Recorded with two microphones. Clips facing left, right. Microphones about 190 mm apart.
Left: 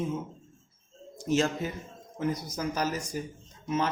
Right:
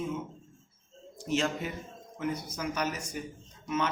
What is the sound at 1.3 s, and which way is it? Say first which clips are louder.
A man's voice: left 3 dB; 40° left (ahead or behind).